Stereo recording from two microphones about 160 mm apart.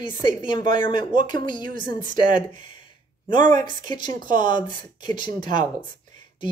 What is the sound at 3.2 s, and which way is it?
Speech, 25° left (ahead or behind).